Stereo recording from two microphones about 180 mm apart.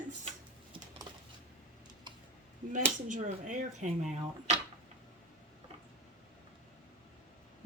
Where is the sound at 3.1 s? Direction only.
45° right (ahead or behind).